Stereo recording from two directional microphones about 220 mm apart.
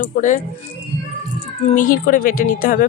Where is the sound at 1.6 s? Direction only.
35° left (ahead or behind).